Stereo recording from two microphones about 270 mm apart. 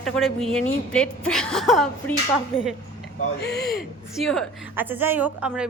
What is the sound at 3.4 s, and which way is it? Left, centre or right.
Speech, left.